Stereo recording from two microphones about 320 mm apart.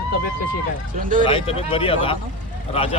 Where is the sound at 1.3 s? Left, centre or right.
Centre.